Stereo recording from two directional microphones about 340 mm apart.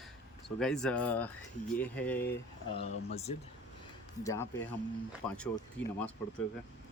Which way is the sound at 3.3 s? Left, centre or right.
Centre.